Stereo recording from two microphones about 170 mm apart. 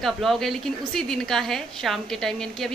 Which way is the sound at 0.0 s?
Centre (ahead or behind).